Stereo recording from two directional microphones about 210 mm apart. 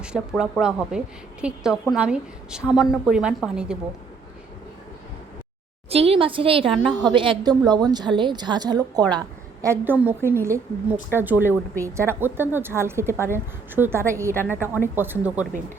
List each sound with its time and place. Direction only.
0.0 s a woman's voice: 5° right (ahead or behind)
5.9 s a woman's voice: 30° right (ahead or behind); by 15.6 s 10° right (ahead or behind)